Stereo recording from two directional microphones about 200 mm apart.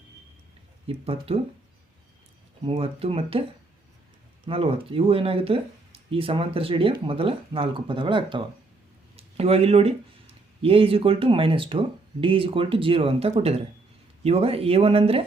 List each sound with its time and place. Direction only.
0.9 s speech: 30° right (ahead or behind)
2.6 s speech: 30° right (ahead or behind)
4.4 s speech: 30° right (ahead or behind)